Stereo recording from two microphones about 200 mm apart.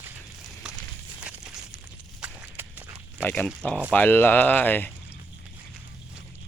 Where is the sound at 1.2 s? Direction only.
5° right (ahead or behind).